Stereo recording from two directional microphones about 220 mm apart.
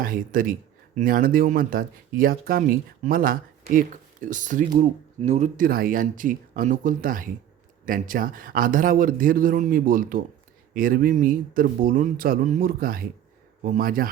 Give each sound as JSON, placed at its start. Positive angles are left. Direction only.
{"t": 0.0, "sound": "speech", "side_deg": -40}